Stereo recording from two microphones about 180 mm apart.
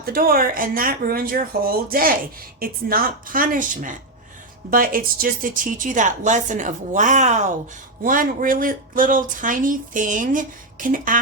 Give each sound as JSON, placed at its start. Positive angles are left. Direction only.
{"t": 0.0, "sound": "speech", "side_deg": -55}